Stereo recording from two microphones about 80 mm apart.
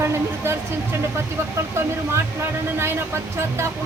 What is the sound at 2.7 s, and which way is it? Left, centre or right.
Speech, right.